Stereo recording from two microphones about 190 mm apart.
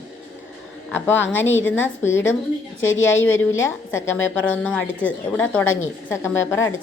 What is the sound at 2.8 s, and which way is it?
Speech, 85° left.